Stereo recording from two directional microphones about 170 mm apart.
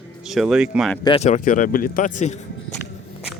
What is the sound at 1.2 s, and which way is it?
Speech, 50° left (ahead or behind).